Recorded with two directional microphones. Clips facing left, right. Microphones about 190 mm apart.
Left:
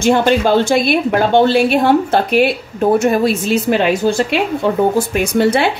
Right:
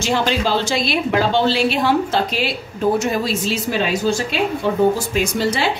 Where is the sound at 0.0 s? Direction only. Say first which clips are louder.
Left 7 dB; 55° left (ahead or behind).